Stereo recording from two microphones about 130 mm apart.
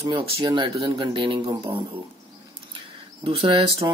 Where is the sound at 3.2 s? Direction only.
50° right (ahead or behind).